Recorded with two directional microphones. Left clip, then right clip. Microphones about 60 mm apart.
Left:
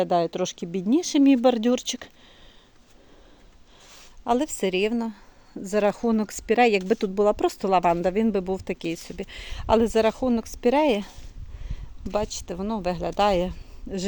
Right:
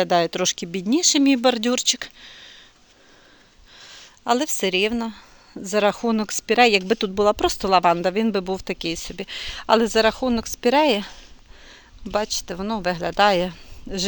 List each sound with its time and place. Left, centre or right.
0.0 s speech: centre
0.8 s speech: left
1.0 s speech: left
4.3 s speech: left
6.6 s speech: left
7.2 s speech: left
11.7 s a sound: left
12.5 s speech: centre